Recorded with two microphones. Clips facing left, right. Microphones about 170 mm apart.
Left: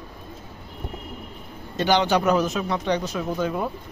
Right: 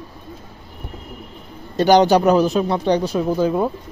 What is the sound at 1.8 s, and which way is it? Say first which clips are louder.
Speech: right 7 dB; 40° right (ahead or behind).